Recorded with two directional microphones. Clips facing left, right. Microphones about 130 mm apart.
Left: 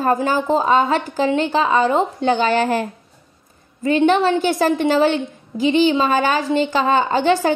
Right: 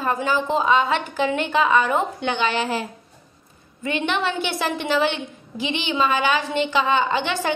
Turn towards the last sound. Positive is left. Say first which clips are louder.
# left 7 dB
turn(degrees=40)  # may be behind; listen again after turning